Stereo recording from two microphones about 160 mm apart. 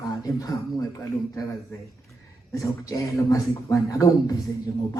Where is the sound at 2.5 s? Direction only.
20° left (ahead or behind).